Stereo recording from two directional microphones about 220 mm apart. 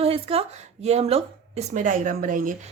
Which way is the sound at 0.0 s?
25° right (ahead or behind).